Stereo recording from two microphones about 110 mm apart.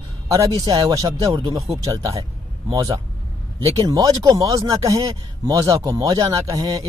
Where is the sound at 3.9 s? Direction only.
35° right (ahead or behind).